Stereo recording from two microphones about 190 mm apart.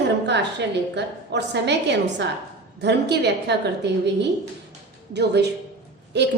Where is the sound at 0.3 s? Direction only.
65° right (ahead or behind).